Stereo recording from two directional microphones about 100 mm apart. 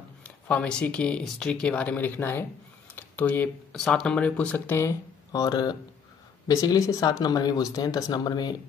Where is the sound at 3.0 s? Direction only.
20° left (ahead or behind).